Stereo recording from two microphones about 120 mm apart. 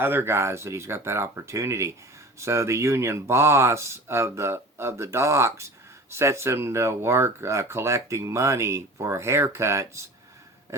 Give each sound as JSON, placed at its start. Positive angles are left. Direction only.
{"t": 0.0, "sound": "speech", "side_deg": -20}